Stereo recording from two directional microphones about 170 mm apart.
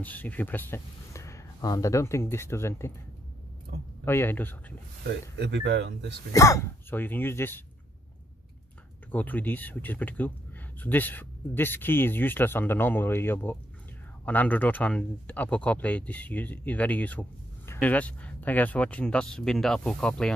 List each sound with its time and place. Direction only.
0.0 s speech: 10° left (ahead or behind)
3.7 s speech: 60° right (ahead or behind)
4.0 s a man's voice: 15° left (ahead or behind)
5.0 s speech: 90° right
6.3 s a man's voice: 20° left (ahead or behind)
9.1 s a man's voice: 10° left (ahead or behind)